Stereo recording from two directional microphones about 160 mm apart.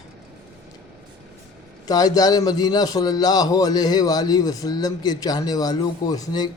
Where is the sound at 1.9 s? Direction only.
25° left (ahead or behind).